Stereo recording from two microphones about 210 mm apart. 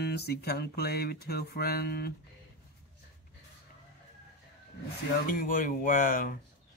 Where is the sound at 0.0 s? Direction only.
50° left (ahead or behind).